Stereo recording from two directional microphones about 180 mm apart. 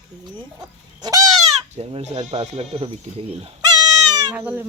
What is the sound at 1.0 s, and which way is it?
Fowl, 20° right (ahead or behind).